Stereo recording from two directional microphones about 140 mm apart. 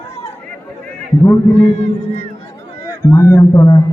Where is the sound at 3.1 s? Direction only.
20° left (ahead or behind).